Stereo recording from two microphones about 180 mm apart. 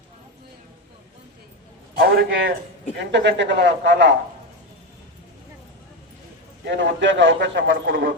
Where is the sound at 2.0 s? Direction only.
55° right (ahead or behind); by 4.1 s 80° right.